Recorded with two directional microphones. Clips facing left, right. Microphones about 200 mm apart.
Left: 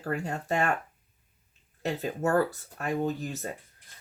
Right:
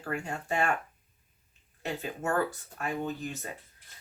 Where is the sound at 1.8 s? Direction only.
40° left (ahead or behind).